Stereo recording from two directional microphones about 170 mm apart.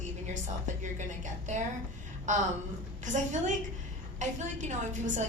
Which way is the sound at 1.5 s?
45° right (ahead or behind).